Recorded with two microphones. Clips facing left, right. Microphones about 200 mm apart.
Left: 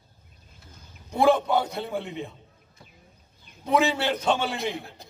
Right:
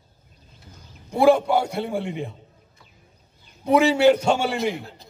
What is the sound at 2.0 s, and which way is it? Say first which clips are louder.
Speech: right 5 dB; 50° right (ahead or behind).